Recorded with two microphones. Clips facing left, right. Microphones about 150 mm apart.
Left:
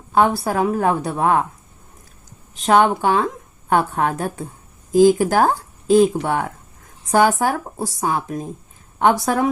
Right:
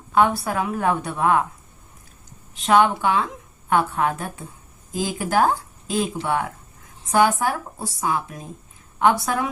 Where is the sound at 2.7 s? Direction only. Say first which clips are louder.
Left 2 dB; 35° left (ahead or behind).